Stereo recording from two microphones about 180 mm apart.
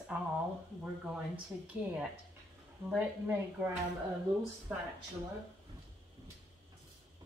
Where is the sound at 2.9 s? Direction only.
10° right (ahead or behind).